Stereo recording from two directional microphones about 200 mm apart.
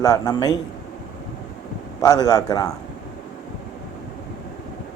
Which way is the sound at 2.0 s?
20° left (ahead or behind).